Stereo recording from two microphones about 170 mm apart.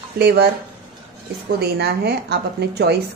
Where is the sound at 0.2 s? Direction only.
70° right (ahead or behind).